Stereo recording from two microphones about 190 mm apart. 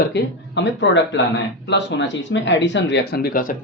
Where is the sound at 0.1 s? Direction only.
65° left (ahead or behind).